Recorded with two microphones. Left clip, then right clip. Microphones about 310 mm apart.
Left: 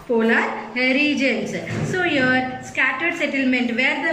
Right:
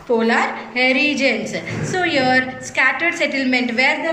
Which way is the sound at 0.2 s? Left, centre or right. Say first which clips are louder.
Right 2 dB; centre.